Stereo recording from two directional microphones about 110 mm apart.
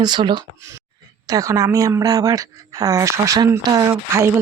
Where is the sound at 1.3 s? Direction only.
35° right (ahead or behind).